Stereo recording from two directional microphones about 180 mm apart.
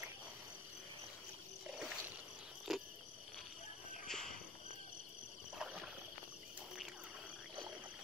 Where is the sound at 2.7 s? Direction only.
Centre (ahead or behind).